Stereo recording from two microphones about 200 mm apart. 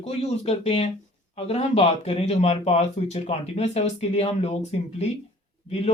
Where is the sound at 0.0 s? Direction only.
30° left (ahead or behind).